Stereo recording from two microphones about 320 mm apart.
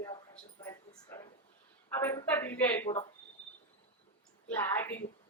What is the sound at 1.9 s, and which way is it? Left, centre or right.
A woman's voice, centre.